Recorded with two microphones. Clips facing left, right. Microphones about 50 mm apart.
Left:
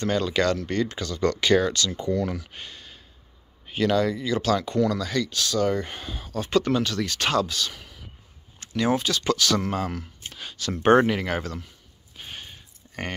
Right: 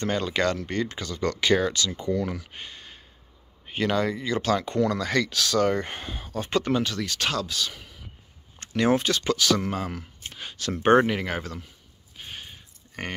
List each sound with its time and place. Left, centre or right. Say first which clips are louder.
0.0 s speech: left 2 dB; right
5.0 s speech: right 2 dB; right
5.3 s speech: right 2 dB; right
5.6 s speech: even; right; by 7.0 s centre
7.0 s speech: left 4 dB; centre
7.5 s speech: even; centre
8.5 s speech: right 1 dB; right
9.2 s speech: even; centre
10.3 s a sound: even; right
10.8 s speech: left 1 dB; centre
12.2 s a sound: left 1 dB; centre